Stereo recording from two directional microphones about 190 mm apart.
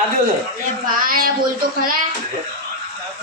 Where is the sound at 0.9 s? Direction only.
50° right (ahead or behind).